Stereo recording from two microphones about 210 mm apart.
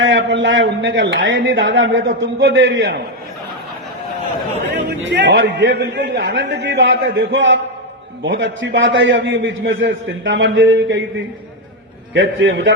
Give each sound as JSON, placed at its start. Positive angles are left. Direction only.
{"t": 0.0, "sound": "a man's voice", "side_deg": -60}
{"t": 4.9, "sound": "a man's voice", "side_deg": -55}
{"t": 12.1, "sound": "a man's voice", "side_deg": -60}